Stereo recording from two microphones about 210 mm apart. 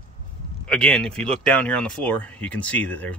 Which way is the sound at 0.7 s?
5° left (ahead or behind).